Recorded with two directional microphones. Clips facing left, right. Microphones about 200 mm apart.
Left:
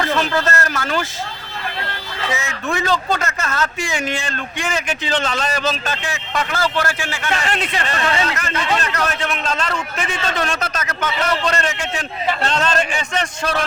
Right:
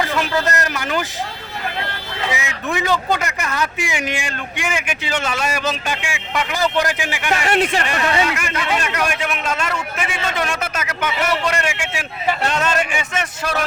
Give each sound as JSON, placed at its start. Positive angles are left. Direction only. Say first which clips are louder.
{"t": 0.0, "sound": "speech", "louder": "left 1 dB", "side_deg": -15}
{"t": 2.3, "sound": "a man's voice", "louder": "left 1 dB", "side_deg": -15}